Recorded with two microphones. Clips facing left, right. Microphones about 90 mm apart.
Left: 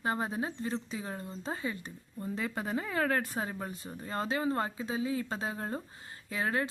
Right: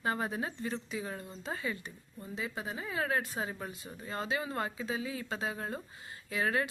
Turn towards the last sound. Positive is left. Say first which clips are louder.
# even
turn(degrees=35)  # may be behind; listen again after turning